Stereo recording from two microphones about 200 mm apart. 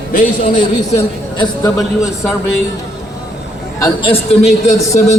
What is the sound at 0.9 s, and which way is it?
A man's voice, 20° left (ahead or behind).